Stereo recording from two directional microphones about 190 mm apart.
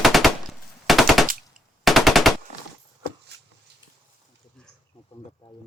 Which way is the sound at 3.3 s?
60° right (ahead or behind).